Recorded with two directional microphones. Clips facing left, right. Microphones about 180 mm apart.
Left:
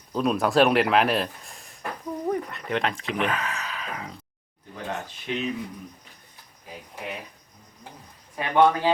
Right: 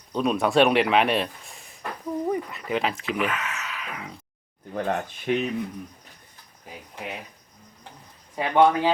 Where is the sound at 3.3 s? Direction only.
35° left (ahead or behind).